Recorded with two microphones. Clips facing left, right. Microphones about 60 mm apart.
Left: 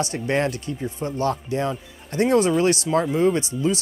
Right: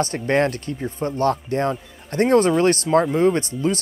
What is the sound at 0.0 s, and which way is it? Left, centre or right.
Speech, right.